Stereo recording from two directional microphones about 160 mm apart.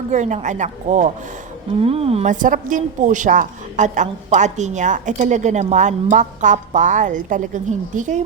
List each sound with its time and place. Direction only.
0.1 s a woman's voice: 50° right (ahead or behind)
1.8 s a woman's voice: 40° right (ahead or behind)